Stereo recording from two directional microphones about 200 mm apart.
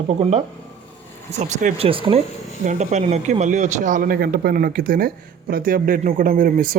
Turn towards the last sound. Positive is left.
turn(degrees=-45)  # may be behind; listen again after turning